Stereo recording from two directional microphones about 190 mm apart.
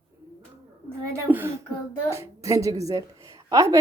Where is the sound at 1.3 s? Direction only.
10° right (ahead or behind).